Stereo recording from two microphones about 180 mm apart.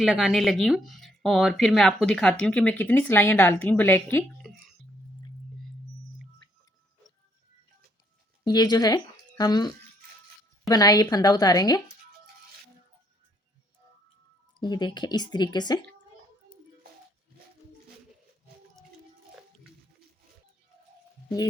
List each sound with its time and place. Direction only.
0.0 s speech: centre (ahead or behind)
4.4 s a sound: centre (ahead or behind)
8.4 s speech: 20° left (ahead or behind)
14.6 s speech: 25° left (ahead or behind)